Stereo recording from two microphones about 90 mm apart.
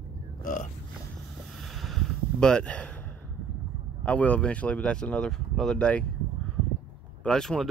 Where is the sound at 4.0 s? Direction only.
15° left (ahead or behind).